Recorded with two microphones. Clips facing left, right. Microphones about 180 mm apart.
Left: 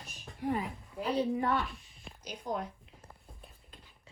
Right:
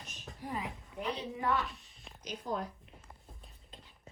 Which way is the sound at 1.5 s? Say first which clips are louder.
Left 1 dB; centre (ahead or behind).